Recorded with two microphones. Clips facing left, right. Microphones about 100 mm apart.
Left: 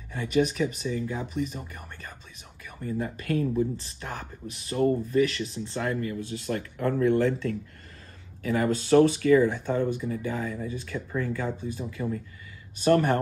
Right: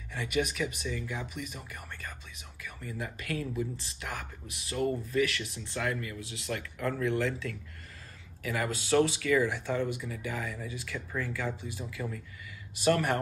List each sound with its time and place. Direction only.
0.1 s speech: 35° left (ahead or behind)